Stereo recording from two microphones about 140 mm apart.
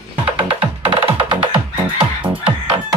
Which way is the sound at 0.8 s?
40° right (ahead or behind).